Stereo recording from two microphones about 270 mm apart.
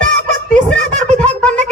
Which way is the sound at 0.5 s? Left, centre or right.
Centre.